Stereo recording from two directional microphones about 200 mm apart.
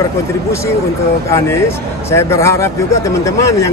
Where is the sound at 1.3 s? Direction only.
15° left (ahead or behind).